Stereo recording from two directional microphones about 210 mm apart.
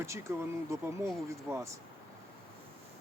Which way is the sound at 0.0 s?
15° right (ahead or behind).